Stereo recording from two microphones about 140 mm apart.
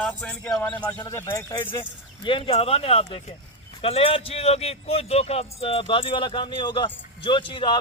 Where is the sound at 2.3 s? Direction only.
40° left (ahead or behind).